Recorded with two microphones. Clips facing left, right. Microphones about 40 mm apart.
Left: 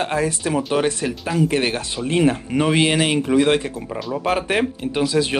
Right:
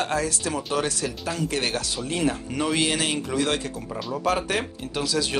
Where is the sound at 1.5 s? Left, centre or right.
Left.